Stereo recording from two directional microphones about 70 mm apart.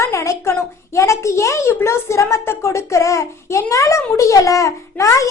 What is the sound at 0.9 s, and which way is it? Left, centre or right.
A woman's voice, left.